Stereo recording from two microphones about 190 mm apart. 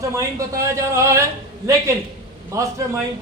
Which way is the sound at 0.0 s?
15° right (ahead or behind).